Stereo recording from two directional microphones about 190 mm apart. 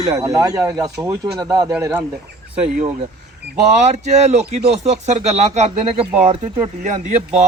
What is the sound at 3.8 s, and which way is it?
Speech, 35° right (ahead or behind).